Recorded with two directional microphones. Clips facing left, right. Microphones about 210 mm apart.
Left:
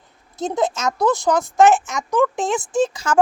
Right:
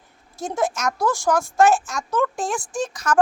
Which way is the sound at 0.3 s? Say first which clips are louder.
Left 3 dB; 20° left (ahead or behind).